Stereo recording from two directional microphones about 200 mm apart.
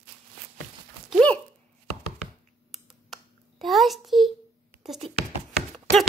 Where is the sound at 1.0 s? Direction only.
5° left (ahead or behind).